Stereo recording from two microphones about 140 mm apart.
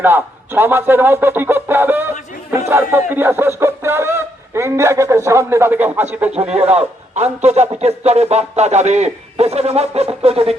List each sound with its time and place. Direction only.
0.0 s speech: 15° right (ahead or behind)
6.3 s a man's voice: 50° right (ahead or behind)